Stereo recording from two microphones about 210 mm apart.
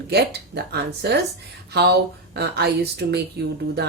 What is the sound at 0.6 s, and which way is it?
Speech, 50° right (ahead or behind).